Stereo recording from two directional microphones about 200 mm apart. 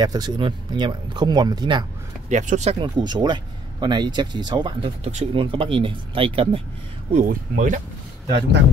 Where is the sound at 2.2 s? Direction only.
35° right (ahead or behind).